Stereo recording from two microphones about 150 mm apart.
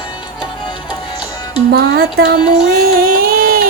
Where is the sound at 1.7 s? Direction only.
90° right.